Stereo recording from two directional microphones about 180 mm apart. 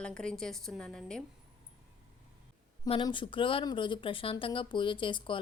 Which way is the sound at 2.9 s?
25° left (ahead or behind).